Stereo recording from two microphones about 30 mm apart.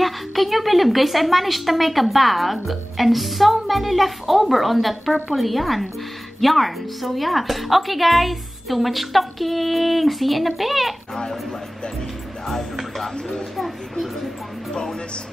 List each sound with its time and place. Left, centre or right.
0.0 s a woman's voice: centre
13.6 s a child's voice: centre
14.7 s music: left